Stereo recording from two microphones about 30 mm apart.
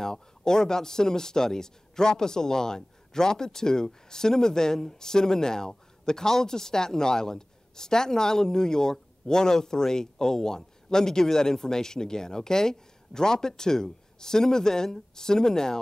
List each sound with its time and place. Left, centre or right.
0.0 s speech: left